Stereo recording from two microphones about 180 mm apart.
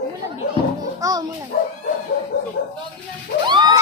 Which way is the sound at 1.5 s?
55° left (ahead or behind).